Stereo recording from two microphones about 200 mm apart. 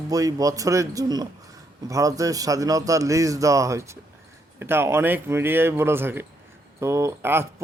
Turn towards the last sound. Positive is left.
turn(degrees=-10)  # may be behind; listen again after turning